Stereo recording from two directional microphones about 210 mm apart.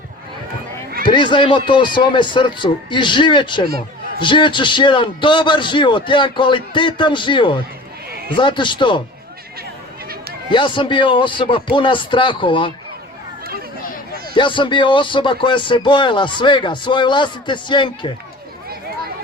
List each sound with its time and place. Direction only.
1.0 s speech: 20° left (ahead or behind)
10.5 s speech: 25° left (ahead or behind)
14.3 s speech: 25° left (ahead or behind)